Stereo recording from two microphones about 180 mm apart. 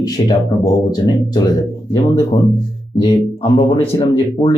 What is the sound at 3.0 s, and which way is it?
Speech, 25° left (ahead or behind).